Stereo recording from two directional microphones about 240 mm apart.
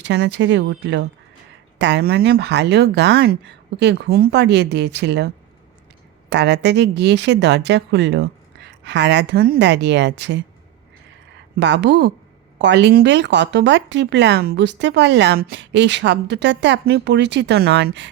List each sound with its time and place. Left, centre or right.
0.0 s speech: right
6.3 s speech: right
11.5 s speech: right